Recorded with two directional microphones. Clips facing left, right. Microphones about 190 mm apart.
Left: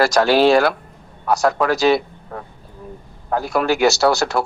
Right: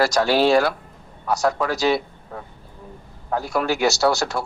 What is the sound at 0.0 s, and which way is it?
A man's voice, 80° left.